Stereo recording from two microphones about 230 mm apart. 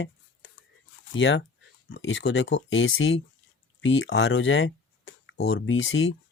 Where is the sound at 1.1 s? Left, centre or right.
Left.